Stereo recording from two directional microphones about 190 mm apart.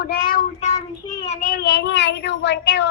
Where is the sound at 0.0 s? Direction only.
50° left (ahead or behind).